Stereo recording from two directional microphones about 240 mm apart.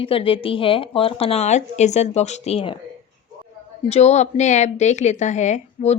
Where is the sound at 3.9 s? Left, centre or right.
Left.